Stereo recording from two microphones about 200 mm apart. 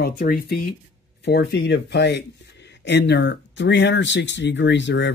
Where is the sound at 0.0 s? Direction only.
50° left (ahead or behind).